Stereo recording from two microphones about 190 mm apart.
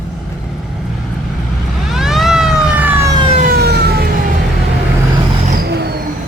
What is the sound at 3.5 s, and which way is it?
Vehicle, 55° right (ahead or behind).